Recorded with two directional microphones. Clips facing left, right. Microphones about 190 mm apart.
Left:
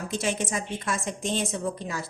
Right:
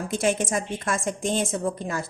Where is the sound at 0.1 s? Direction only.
50° right (ahead or behind).